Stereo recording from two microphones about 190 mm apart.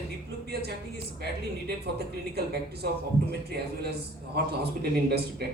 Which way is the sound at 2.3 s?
60° right (ahead or behind).